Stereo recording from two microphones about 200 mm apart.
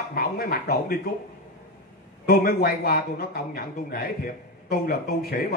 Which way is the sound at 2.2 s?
50° left (ahead or behind).